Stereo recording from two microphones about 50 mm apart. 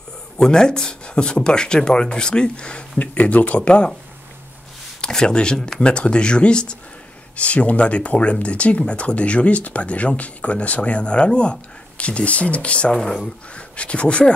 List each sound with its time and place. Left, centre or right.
0.4 s speech: centre
5.0 s speech: centre
12.9 s speech: centre
13.6 s speech: left